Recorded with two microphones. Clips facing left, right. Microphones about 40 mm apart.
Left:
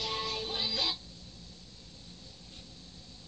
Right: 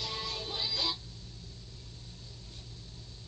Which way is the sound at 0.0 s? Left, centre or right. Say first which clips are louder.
Left 3 dB; left.